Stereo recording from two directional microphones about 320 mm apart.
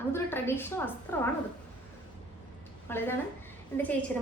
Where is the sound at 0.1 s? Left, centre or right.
Centre.